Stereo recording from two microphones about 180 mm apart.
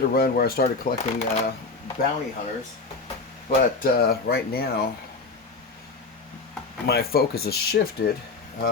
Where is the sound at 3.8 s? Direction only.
60° left (ahead or behind).